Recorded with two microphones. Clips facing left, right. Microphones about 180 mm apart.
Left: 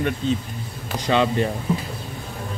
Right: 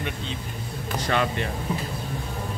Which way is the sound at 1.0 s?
20° left (ahead or behind).